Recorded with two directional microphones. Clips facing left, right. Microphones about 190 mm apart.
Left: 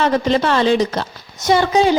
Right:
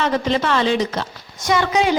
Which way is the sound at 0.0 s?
35° left (ahead or behind).